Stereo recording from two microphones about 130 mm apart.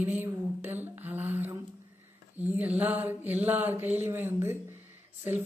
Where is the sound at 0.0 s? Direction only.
15° right (ahead or behind).